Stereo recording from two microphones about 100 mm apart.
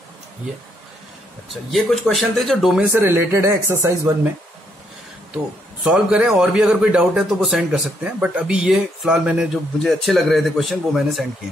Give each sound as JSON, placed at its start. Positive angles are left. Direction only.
{"t": 1.5, "sound": "speech", "side_deg": 0}
{"t": 2.9, "sound": "speech", "side_deg": -25}
{"t": 5.9, "sound": "a man's voice", "side_deg": -10}